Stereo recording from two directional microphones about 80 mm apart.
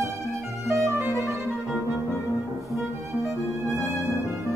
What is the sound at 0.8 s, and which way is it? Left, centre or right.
Music, right.